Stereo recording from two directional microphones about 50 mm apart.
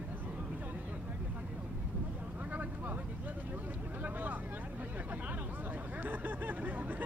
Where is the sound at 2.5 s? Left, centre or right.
Right.